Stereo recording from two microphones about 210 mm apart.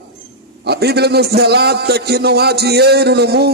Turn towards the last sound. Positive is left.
turn(degrees=-50)  # may be behind; listen again after turning